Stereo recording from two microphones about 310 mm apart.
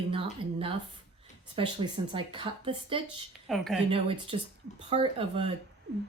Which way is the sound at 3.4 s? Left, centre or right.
Centre.